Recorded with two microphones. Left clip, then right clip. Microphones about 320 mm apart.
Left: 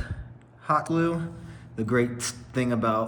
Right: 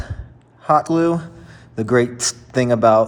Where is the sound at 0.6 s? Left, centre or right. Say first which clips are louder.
Right 9 dB; centre.